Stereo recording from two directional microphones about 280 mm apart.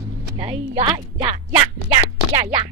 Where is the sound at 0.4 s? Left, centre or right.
Right.